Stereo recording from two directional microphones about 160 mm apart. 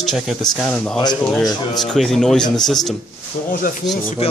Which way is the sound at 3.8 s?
25° left (ahead or behind).